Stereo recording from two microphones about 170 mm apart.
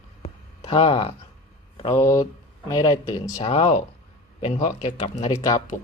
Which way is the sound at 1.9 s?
20° left (ahead or behind).